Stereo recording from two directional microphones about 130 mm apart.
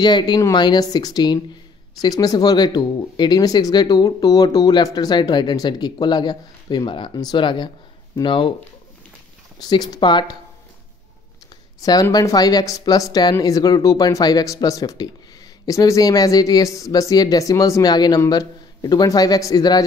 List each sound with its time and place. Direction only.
0.0 s speech: 30° left (ahead or behind)
9.6 s speech: 35° left (ahead or behind)
11.8 s speech: 30° left (ahead or behind)